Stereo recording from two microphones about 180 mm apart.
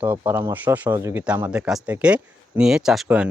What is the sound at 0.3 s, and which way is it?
Speech, 10° right (ahead or behind).